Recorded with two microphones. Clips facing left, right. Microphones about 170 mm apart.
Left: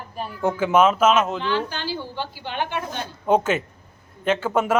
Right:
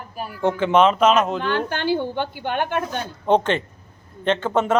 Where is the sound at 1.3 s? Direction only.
55° right (ahead or behind).